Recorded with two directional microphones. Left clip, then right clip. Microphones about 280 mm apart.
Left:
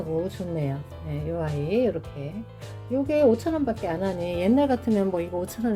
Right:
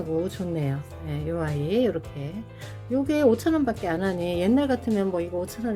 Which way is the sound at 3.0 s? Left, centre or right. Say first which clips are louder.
Left 1 dB; centre.